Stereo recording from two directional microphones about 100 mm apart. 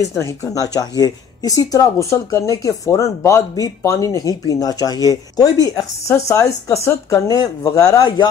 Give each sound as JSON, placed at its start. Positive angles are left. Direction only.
{"t": 0.1, "sound": "speech", "side_deg": 30}